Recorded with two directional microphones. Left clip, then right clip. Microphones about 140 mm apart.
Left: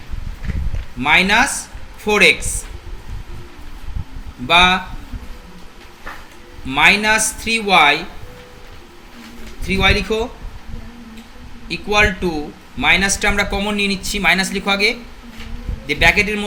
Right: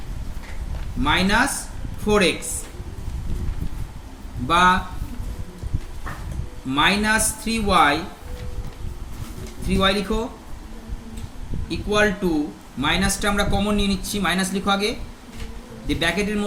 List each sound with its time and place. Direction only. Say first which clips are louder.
1.0 s speech: left 6 dB; 45° left (ahead or behind)
4.4 s speech: left 4 dB; 45° left (ahead or behind)
6.7 s speech: left 6 dB; 45° left (ahead or behind)
9.6 s speech: left 5 dB; 45° left (ahead or behind)
11.7 s speech: left 5 dB; 45° left (ahead or behind)